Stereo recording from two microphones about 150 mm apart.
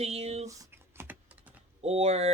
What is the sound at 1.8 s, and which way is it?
Speech, 45° right (ahead or behind).